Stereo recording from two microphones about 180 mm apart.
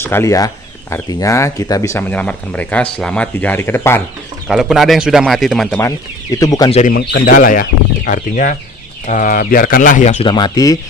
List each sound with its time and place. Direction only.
0.0 s speech: 15° left (ahead or behind)
4.4 s speech: centre (ahead or behind)
6.3 s speech: 20° left (ahead or behind)
6.7 s speech: 35° left (ahead or behind)
6.9 s speech: 55° left (ahead or behind)
10.2 s speech: 25° left (ahead or behind)